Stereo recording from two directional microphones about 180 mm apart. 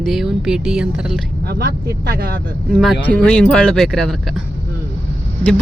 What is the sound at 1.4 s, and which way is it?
Speech, 60° right (ahead or behind).